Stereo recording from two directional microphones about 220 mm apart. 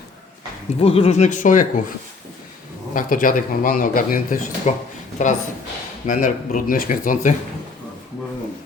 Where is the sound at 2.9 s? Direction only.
40° left (ahead or behind).